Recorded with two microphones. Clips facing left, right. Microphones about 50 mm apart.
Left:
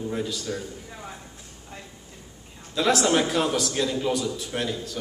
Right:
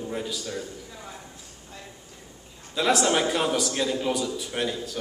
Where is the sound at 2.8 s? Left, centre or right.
Centre.